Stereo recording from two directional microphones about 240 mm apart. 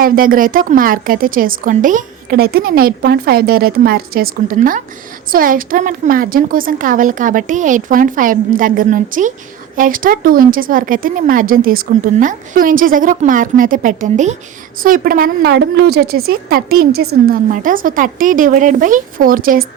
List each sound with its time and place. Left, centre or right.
0.0 s a woman's voice: right